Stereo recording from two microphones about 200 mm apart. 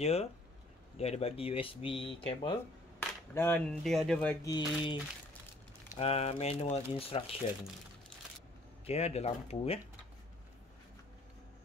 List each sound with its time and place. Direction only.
0.0 s speech: 30° left (ahead or behind)
3.0 s speech: 10° left (ahead or behind)
4.5 s speech: 20° left (ahead or behind)
5.9 s speech: 30° left (ahead or behind)
8.8 s speech: 30° left (ahead or behind)